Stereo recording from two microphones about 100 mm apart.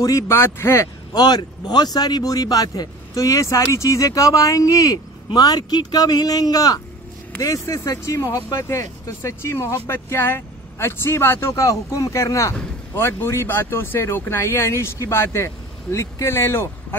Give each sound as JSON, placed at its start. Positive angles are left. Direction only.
{"t": 0.0, "sound": "speech", "side_deg": 35}
{"t": 0.4, "sound": "speech", "side_deg": 25}
{"t": 1.1, "sound": "speech", "side_deg": 45}